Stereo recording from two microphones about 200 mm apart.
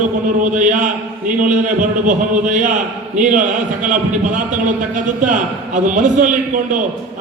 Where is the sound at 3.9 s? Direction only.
40° right (ahead or behind).